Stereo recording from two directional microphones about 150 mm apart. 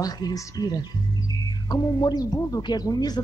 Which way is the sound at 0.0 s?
25° left (ahead or behind).